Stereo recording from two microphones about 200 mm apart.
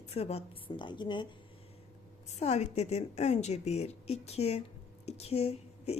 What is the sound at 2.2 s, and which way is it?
A woman's voice, 35° left (ahead or behind).